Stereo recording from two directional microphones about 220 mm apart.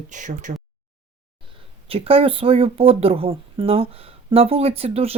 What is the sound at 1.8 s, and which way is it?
Speech, 25° right (ahead or behind).